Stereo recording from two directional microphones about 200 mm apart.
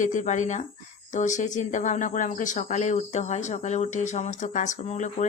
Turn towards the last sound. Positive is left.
turn(degrees=35)  # may be behind; listen again after turning